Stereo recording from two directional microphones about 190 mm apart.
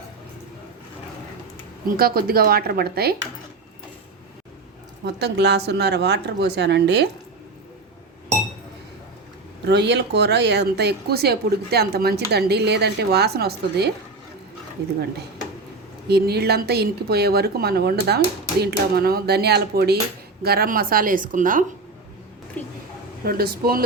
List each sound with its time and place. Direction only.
2.0 s speech: 50° right (ahead or behind)
5.0 s speech: 60° right (ahead or behind)
9.6 s speech: 65° right (ahead or behind)
16.0 s speech: 60° right (ahead or behind)
22.6 s speech: 10° left (ahead or behind)
23.2 s speech: 55° right (ahead or behind)